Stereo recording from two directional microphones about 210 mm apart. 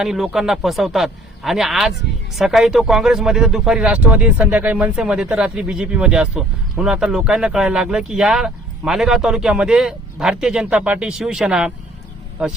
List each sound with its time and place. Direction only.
0.0 s speech: centre (ahead or behind)